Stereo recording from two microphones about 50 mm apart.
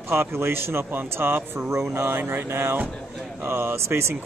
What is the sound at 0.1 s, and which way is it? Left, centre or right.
Speech, right.